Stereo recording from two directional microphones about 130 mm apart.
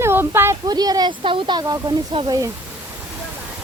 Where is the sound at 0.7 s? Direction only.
30° right (ahead or behind).